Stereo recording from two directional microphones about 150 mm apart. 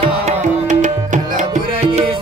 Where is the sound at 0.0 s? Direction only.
55° right (ahead or behind).